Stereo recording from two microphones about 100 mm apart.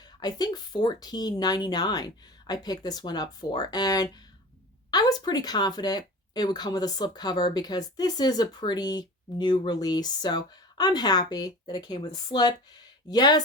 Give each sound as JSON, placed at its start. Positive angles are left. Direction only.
{"t": 0.2, "sound": "speech", "side_deg": 40}